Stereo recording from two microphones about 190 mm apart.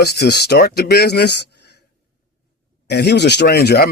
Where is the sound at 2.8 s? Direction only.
60° left (ahead or behind).